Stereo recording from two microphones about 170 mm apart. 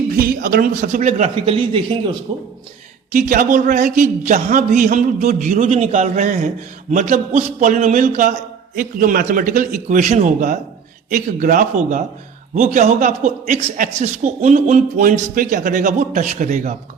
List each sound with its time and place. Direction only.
0.1 s a man's voice: 60° right (ahead or behind); by 2.1 s 30° right (ahead or behind)
3.1 s a man's voice: 50° right (ahead or behind)